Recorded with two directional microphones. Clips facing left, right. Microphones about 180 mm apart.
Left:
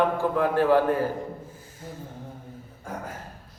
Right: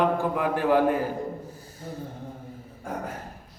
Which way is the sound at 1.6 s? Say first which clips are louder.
Right 3 dB; 35° right (ahead or behind).